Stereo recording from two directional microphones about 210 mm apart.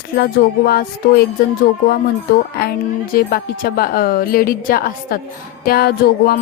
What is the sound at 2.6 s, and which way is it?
Music, 45° left (ahead or behind).